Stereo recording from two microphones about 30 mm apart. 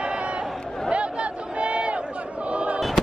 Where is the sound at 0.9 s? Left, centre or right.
Right.